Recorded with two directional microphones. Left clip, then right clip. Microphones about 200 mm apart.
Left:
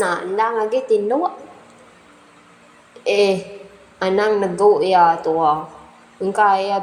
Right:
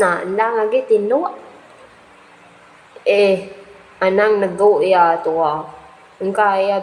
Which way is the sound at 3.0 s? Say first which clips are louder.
Right 3 dB; 30° left (ahead or behind).